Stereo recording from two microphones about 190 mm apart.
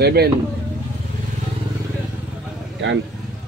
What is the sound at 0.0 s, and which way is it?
Speech, 55° right (ahead or behind).